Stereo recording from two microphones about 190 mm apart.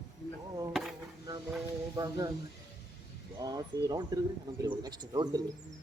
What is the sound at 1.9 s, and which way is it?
Speech, 20° right (ahead or behind).